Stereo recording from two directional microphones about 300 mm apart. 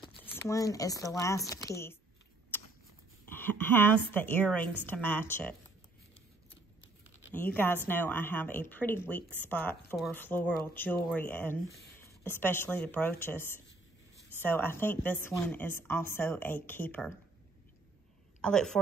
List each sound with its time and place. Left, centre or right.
0.0 s speech: centre
3.3 s a sound: centre
4.1 s speech: centre
6.8 s a sound: left
7.3 s speech: centre
18.4 s speech: centre